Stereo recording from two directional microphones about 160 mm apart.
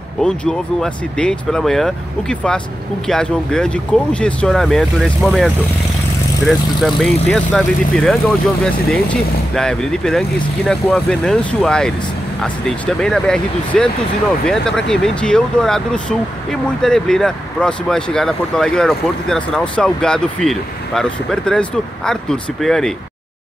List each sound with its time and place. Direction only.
0.2 s speech: 5° left (ahead or behind)
7.0 s speech: centre (ahead or behind)